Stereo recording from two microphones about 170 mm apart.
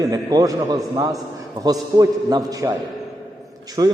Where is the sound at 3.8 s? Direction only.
25° right (ahead or behind).